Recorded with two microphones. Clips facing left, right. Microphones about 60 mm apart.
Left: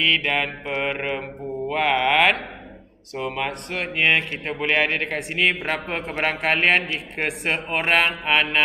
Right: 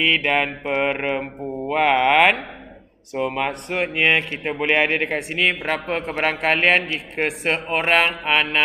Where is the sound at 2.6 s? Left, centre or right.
Centre.